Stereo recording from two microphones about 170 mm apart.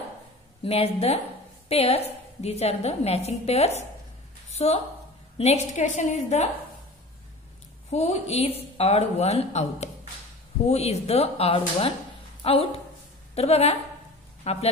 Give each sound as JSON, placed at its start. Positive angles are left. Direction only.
{"t": 0.7, "sound": "a woman's voice", "side_deg": 40}
{"t": 7.9, "sound": "a woman's voice", "side_deg": 40}